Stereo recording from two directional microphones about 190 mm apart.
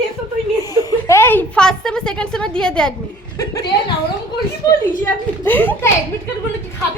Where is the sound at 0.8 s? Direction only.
20° left (ahead or behind).